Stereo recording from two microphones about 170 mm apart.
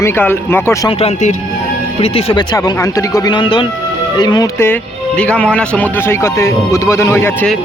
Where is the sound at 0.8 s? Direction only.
40° left (ahead or behind); by 4.4 s 25° left (ahead or behind).